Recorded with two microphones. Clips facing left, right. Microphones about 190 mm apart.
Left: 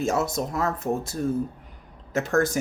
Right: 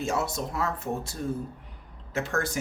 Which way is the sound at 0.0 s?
45° left (ahead or behind).